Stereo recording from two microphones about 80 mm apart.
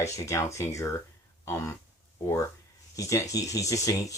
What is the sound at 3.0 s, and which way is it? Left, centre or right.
Speech, left.